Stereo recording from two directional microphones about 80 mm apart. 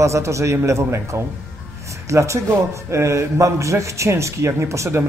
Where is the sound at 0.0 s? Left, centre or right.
Right.